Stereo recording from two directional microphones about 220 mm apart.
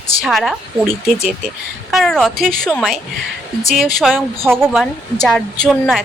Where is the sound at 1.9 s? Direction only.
Centre (ahead or behind).